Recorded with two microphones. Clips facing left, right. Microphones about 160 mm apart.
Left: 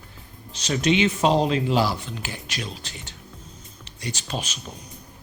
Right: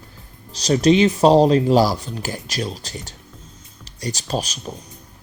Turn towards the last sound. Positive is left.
turn(degrees=-40)  # may be behind; listen again after turning